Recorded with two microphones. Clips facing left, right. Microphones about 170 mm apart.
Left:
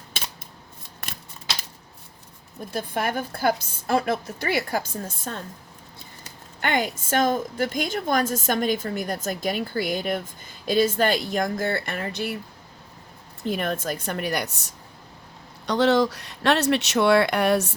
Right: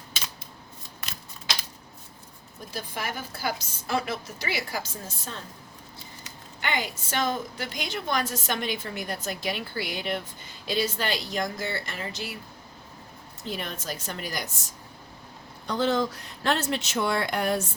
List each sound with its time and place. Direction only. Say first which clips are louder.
2.7 s a woman's voice: left 8 dB; 55° left (ahead or behind)
6.6 s a woman's voice: left 6 dB; 50° left (ahead or behind)
13.5 s a woman's voice: left 8 dB; 55° left (ahead or behind); by 17.7 s 70° left (ahead or behind)